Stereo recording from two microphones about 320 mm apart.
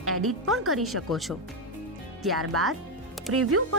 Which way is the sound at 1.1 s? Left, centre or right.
Centre.